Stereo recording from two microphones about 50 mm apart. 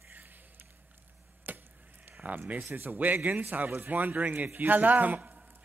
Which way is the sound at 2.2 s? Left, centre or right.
Right.